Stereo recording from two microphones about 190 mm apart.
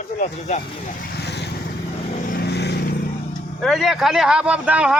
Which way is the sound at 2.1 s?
45° left (ahead or behind).